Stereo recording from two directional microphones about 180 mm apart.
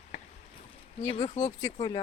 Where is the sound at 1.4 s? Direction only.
20° left (ahead or behind).